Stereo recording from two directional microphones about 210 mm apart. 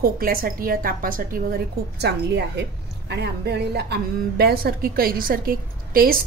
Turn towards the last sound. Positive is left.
turn(degrees=-45)  # may be behind; listen again after turning